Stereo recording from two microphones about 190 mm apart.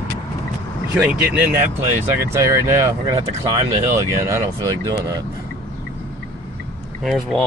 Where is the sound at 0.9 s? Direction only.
10° right (ahead or behind).